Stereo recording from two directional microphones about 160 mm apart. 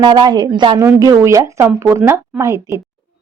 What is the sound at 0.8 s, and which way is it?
A woman's voice, 20° right (ahead or behind).